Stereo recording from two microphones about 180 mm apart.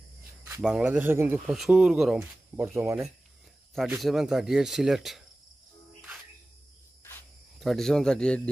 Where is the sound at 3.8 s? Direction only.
Centre (ahead or behind).